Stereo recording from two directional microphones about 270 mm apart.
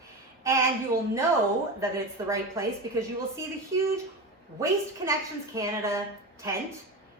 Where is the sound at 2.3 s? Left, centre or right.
Centre.